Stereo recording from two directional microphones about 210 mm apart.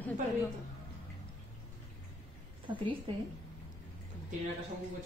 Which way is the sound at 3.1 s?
25° right (ahead or behind).